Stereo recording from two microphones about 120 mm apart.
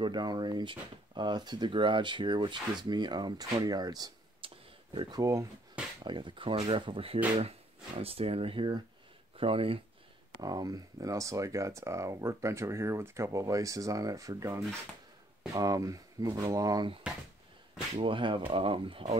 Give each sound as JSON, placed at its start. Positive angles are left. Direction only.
{"t": 0.0, "sound": "speech", "side_deg": -40}
{"t": 4.4, "sound": "a sound", "side_deg": -45}
{"t": 4.9, "sound": "speech", "side_deg": -45}
{"t": 5.2, "sound": "speech", "side_deg": -25}
{"t": 6.0, "sound": "speech", "side_deg": -40}
{"t": 10.4, "sound": "speech", "side_deg": -30}
{"t": 17.1, "sound": "speech", "side_deg": -5}
{"t": 18.0, "sound": "speech", "side_deg": -45}